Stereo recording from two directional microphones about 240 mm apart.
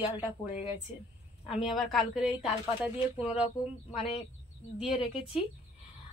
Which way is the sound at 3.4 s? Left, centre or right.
Left.